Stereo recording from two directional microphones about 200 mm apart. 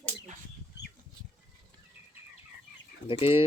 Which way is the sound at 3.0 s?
25° left (ahead or behind).